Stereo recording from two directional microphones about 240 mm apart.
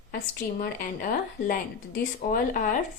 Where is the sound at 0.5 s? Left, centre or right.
Left.